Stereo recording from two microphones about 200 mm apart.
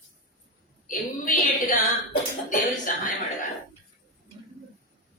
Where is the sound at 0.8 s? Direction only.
40° left (ahead or behind).